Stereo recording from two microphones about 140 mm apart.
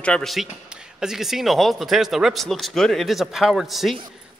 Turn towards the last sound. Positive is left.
turn(degrees=0)  # may be behind; listen again after turning